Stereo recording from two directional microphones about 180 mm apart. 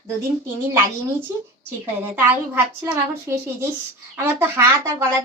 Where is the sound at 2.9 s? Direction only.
15° right (ahead or behind).